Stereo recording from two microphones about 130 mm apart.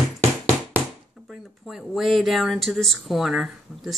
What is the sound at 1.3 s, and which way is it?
Speech, centre (ahead or behind).